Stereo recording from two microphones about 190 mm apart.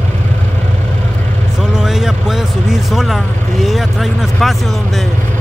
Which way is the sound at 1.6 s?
Centre (ahead or behind).